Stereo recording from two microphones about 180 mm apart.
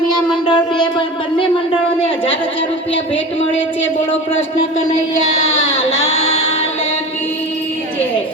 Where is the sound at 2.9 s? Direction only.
90° left.